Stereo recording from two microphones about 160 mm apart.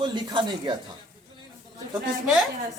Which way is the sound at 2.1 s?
Centre (ahead or behind).